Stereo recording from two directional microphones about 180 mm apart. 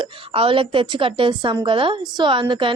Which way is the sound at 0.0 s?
30° right (ahead or behind).